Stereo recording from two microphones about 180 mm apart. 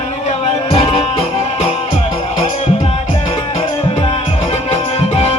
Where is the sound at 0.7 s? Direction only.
30° left (ahead or behind).